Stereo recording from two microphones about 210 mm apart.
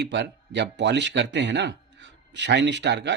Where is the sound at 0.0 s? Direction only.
55° right (ahead or behind).